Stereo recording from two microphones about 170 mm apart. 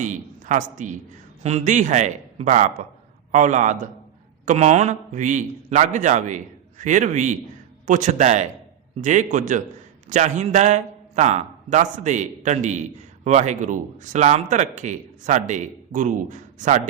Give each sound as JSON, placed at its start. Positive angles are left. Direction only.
{"t": 0.0, "sound": "a woman's voice", "side_deg": -45}